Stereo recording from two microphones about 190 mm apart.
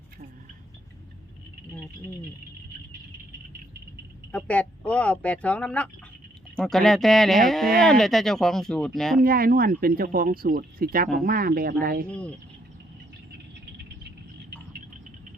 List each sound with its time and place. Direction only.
4.3 s speech: 5° left (ahead or behind)
9.2 s speech: 50° right (ahead or behind)
12.1 s speech: 5° left (ahead or behind)